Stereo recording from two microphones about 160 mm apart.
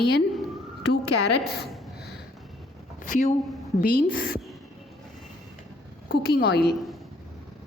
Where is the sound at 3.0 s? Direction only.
55° left (ahead or behind).